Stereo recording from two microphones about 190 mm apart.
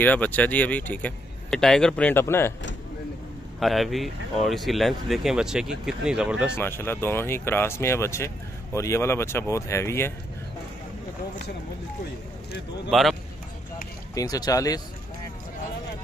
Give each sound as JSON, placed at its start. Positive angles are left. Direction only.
{"t": 0.0, "sound": "speech", "side_deg": 10}
{"t": 3.5, "sound": "speech", "side_deg": 0}
{"t": 6.5, "sound": "speech", "side_deg": 10}
{"t": 12.9, "sound": "speech", "side_deg": 0}
{"t": 14.1, "sound": "speech", "side_deg": 20}